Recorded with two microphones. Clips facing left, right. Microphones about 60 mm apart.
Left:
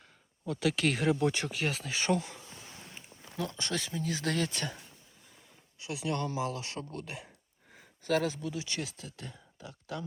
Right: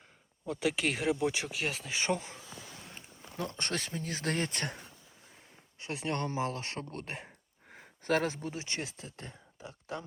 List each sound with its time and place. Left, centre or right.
0.4 s speech: right
1.9 s speech: centre
3.3 s speech: right
5.8 s speech: right